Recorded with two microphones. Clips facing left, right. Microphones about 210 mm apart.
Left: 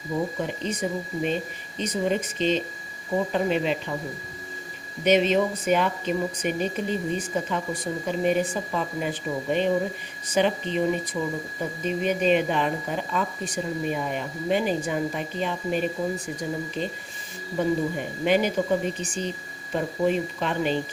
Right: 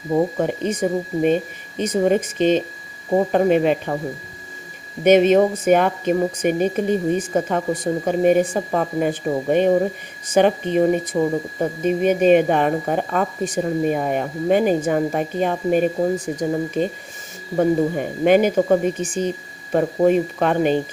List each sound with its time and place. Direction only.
0.1 s a woman's voice: 50° right (ahead or behind)
5.0 s a woman's voice: 50° right (ahead or behind)
16.1 s speech: 90° right
16.5 s a woman's voice: 50° right (ahead or behind)